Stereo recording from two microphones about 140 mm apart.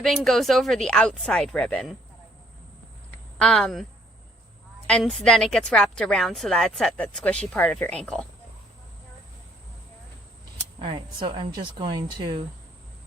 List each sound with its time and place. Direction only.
0.0 s a woman's voice: centre (ahead or behind)
3.3 s a woman's voice: 5° left (ahead or behind)
4.9 s a woman's voice: 5° left (ahead or behind)
10.8 s speech: 40° right (ahead or behind)